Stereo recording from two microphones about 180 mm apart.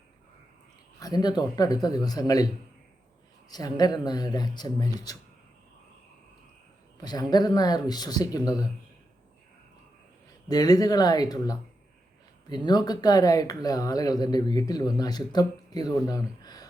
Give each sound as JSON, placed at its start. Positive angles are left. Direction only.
{"t": 0.9, "sound": "speech", "side_deg": 20}
{"t": 3.5, "sound": "speech", "side_deg": 20}
{"t": 7.0, "sound": "speech", "side_deg": 20}
{"t": 10.5, "sound": "speech", "side_deg": 20}